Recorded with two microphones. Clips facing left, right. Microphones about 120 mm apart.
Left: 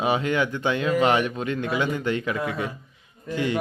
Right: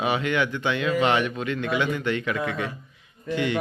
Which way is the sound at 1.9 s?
20° left (ahead or behind).